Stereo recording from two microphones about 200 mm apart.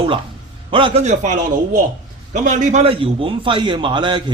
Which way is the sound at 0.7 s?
25° right (ahead or behind).